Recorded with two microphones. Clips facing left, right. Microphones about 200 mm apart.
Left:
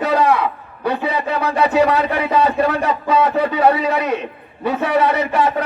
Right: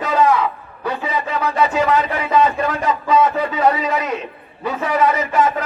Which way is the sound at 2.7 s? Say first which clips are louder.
Even; 60° left (ahead or behind).